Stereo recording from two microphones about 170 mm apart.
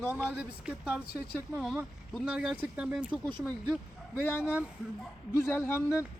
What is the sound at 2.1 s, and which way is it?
Speech, centre (ahead or behind).